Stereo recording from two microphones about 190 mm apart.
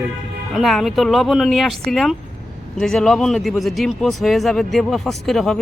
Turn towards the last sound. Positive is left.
turn(degrees=0)  # may be behind; listen again after turning